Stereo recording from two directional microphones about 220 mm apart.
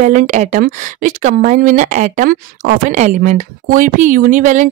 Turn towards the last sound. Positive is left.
turn(degrees=-35)  # may be behind; listen again after turning